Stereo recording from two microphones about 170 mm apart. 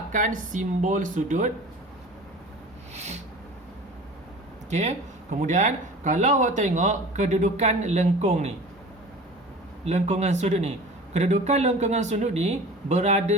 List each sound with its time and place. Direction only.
0.1 s speech: 50° right (ahead or behind)
2.9 s a sound: 40° right (ahead or behind)
4.7 s speech: 45° right (ahead or behind)
9.8 s a man's voice: 40° right (ahead or behind)